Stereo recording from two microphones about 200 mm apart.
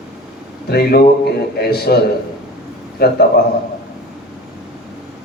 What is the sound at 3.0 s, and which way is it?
Speech, 55° left (ahead or behind).